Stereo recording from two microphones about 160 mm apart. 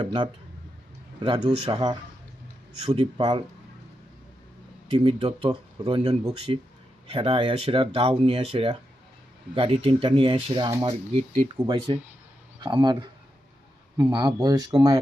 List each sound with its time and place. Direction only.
0.0 s speech: 30° right (ahead or behind)
4.9 s speech: 30° right (ahead or behind)